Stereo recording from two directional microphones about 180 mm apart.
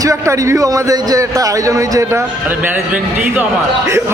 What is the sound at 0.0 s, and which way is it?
Speech, 20° right (ahead or behind).